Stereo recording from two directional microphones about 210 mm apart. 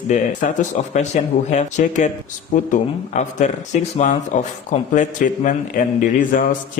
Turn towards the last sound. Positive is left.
turn(degrees=40)  # may be behind; listen again after turning